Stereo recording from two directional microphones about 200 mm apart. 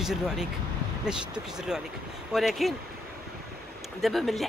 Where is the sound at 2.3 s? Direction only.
Centre (ahead or behind).